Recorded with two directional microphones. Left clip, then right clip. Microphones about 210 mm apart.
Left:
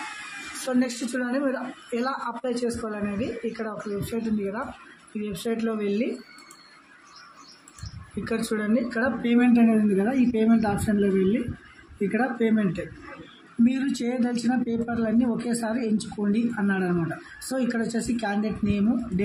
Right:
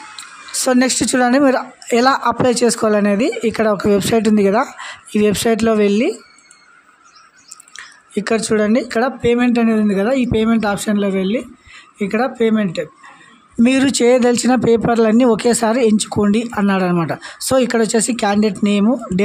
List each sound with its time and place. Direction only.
0.7 s a woman's voice: 55° right (ahead or behind)
8.2 s a woman's voice: 45° right (ahead or behind)
12.1 s a woman's voice: 55° right (ahead or behind)